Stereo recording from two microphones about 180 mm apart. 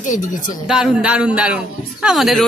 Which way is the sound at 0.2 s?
45° left (ahead or behind).